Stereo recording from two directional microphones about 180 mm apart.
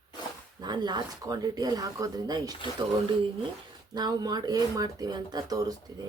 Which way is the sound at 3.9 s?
20° right (ahead or behind).